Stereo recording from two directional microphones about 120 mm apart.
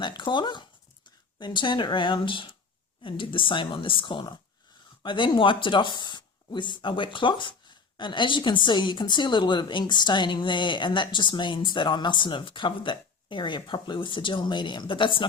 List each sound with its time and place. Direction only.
0.0 s speech: 40° left (ahead or behind)